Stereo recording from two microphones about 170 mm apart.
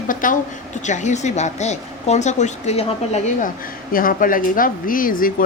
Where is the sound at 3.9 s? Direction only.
55° left (ahead or behind).